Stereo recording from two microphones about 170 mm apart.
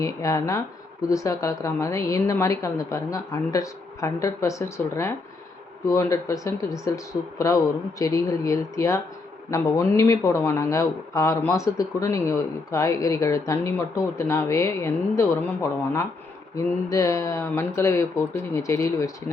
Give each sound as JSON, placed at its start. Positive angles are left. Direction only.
{"t": 0.0, "sound": "speech", "side_deg": 20}
{"t": 16.6, "sound": "speech", "side_deg": 20}